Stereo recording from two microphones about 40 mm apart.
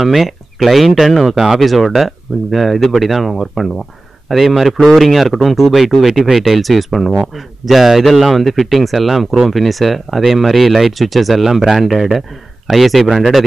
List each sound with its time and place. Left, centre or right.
0.0 s speech: centre
1.3 s speech: centre
1.6 s speech: centre